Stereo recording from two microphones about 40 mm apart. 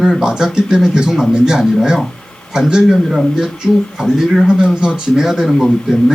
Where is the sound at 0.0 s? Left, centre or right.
Centre.